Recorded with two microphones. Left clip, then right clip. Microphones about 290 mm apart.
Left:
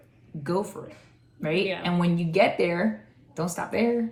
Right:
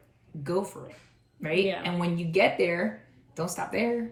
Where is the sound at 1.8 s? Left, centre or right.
Centre.